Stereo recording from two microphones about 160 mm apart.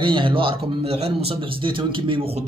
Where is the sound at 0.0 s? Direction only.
30° right (ahead or behind).